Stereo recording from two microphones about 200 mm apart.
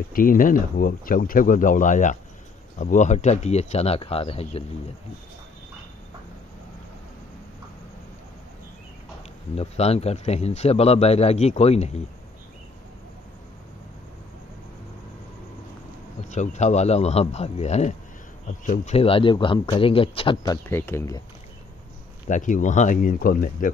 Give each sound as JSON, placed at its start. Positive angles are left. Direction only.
{"t": 0.1, "sound": "a man's voice", "side_deg": 45}
{"t": 9.6, "sound": "a man's voice", "side_deg": 30}
{"t": 16.3, "sound": "a man's voice", "side_deg": 35}
{"t": 20.6, "sound": "speech", "side_deg": 10}
{"t": 22.3, "sound": "a man's voice", "side_deg": 40}